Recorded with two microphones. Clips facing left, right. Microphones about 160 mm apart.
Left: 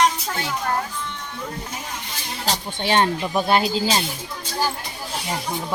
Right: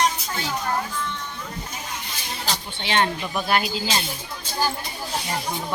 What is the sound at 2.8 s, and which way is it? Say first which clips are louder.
Speech: left 3 dB; 35° left (ahead or behind).